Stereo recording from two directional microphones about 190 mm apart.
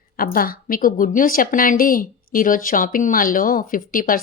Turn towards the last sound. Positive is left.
turn(degrees=45)  # may be behind; listen again after turning